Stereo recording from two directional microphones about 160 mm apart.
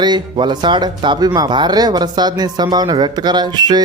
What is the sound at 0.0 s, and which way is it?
Speech, 30° right (ahead or behind).